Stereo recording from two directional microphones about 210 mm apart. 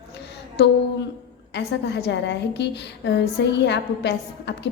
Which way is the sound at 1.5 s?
55° left (ahead or behind).